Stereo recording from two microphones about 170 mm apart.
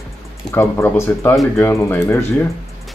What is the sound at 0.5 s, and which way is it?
Speech, 15° left (ahead or behind).